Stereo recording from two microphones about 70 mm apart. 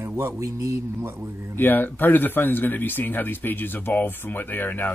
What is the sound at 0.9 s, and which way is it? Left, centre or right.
Speech, right.